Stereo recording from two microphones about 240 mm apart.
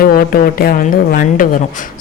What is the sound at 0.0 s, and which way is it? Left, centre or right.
A woman's voice, left.